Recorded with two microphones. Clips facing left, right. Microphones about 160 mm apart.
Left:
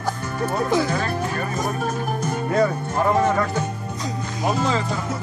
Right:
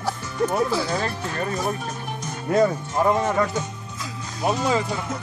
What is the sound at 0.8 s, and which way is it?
Speech, 55° left (ahead or behind).